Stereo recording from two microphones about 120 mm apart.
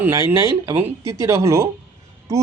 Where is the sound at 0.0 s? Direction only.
20° right (ahead or behind).